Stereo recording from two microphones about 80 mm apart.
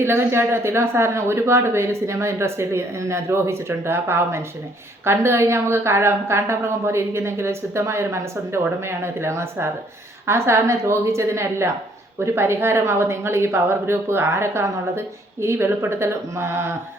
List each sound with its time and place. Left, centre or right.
0.0 s a woman's voice: right